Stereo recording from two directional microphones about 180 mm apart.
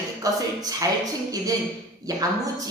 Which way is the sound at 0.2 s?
20° right (ahead or behind).